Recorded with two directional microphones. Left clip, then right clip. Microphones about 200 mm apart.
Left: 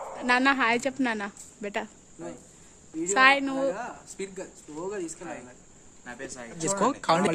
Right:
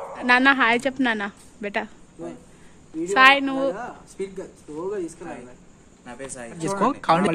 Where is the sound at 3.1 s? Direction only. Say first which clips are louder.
Right 5 dB; centre (ahead or behind).